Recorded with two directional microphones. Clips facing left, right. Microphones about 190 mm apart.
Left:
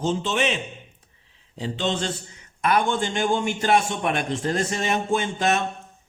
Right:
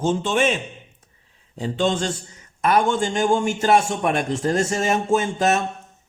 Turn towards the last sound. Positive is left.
turn(degrees=-40)  # may be behind; listen again after turning